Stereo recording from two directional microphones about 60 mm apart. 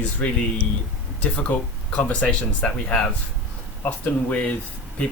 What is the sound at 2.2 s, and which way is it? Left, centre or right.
Speech, centre.